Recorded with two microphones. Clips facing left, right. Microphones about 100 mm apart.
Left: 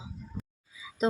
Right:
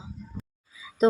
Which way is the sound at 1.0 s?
40° right (ahead or behind).